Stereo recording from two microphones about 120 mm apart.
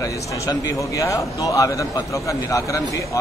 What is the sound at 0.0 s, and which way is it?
A man's voice, 30° left (ahead or behind).